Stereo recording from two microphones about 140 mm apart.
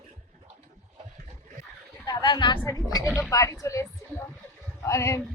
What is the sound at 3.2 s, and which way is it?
Oink, 20° left (ahead or behind).